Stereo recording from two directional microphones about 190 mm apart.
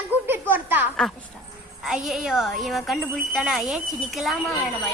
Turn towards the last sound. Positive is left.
turn(degrees=0)  # may be behind; listen again after turning